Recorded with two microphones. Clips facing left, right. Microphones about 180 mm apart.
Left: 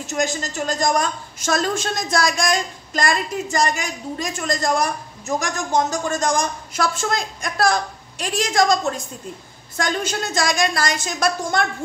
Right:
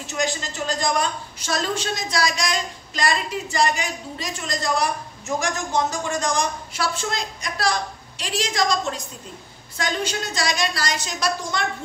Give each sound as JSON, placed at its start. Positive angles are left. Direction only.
{"t": 0.1, "sound": "a woman's voice", "side_deg": 45}